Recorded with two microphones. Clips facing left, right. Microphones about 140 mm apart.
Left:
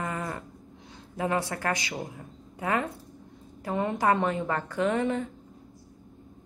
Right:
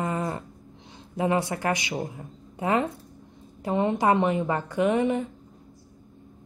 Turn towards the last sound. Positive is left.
turn(degrees=-15)  # may be behind; listen again after turning